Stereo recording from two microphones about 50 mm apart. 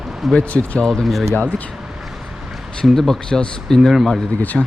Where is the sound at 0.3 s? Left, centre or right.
Left.